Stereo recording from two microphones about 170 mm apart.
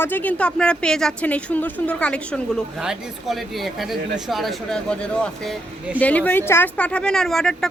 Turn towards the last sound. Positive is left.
turn(degrees=5)  # may be behind; listen again after turning